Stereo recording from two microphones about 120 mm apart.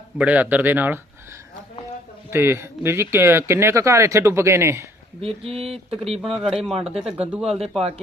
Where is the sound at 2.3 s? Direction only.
20° right (ahead or behind).